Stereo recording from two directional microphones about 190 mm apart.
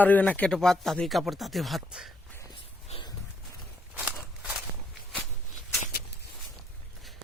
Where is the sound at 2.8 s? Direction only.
30° left (ahead or behind).